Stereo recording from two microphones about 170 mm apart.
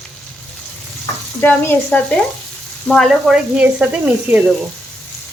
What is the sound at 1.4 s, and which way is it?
Stir, 10° left (ahead or behind).